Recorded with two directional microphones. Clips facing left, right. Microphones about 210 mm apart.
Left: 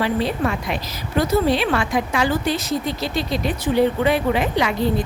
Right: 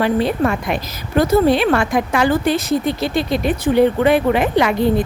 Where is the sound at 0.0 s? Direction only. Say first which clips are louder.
Right 4 dB; 50° right (ahead or behind).